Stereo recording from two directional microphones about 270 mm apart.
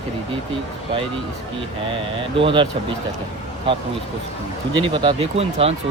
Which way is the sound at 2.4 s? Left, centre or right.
Centre.